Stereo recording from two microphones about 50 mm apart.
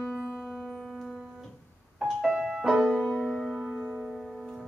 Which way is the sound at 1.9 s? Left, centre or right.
Centre.